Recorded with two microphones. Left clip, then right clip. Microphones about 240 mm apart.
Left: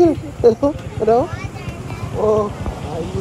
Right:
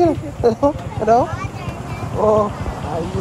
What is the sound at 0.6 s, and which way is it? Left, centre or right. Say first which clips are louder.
Speech: right 1 dB; right.